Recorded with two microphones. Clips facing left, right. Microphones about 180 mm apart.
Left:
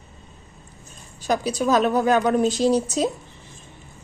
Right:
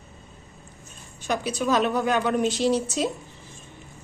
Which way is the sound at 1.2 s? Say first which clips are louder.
Left 4 dB; 40° left (ahead or behind).